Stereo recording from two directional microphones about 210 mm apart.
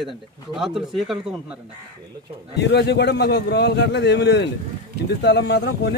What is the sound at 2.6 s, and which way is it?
A man's voice, 55° left (ahead or behind).